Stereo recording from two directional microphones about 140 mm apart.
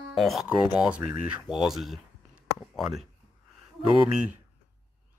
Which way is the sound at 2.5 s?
Centre (ahead or behind).